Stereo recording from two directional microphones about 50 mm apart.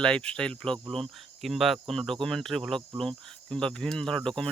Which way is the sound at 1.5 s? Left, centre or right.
Centre.